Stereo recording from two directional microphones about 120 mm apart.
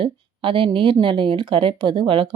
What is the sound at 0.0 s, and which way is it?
A woman's voice, 45° right (ahead or behind).